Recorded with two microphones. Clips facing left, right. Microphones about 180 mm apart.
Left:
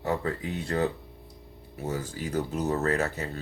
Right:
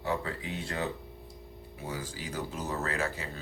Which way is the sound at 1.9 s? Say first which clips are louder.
Left 7 dB; 45° left (ahead or behind).